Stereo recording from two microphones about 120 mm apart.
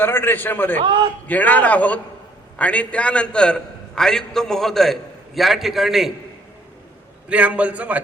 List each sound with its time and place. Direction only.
0.0 s a man's voice: 15° left (ahead or behind); by 6.1 s centre (ahead or behind)
7.3 s a man's voice: 10° right (ahead or behind)